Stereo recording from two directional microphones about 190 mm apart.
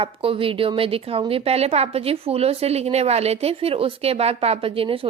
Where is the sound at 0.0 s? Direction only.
30° right (ahead or behind).